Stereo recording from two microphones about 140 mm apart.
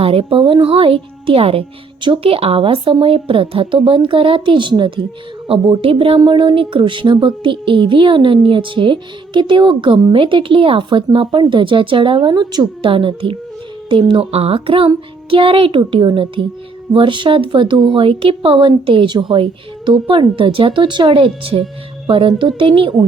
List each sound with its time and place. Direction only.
0.0 s speech: 45° right (ahead or behind)